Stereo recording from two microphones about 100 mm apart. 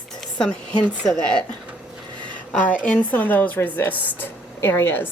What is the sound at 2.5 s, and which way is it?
A woman's voice, 15° left (ahead or behind).